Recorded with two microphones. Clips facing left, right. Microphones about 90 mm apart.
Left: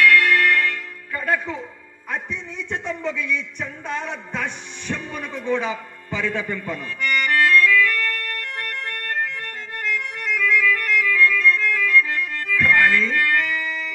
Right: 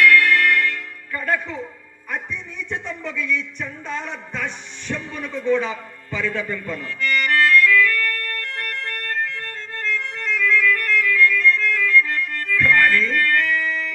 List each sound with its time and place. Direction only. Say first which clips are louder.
0.0 s music: right 1 dB; 25° left (ahead or behind)
10.5 s organ: right 1 dB; 15° left (ahead or behind)